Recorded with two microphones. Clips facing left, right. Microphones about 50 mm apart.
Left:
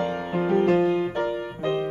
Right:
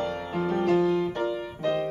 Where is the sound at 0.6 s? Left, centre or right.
Left.